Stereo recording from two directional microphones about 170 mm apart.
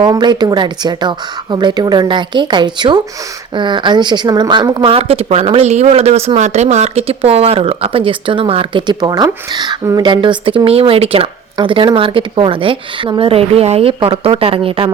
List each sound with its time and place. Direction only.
0.0 s speech: 25° right (ahead or behind)